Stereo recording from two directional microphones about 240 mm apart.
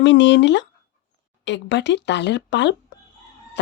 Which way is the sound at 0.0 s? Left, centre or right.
Left.